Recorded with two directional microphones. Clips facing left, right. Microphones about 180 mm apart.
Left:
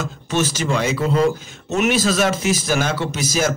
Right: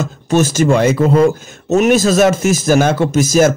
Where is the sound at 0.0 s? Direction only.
45° right (ahead or behind).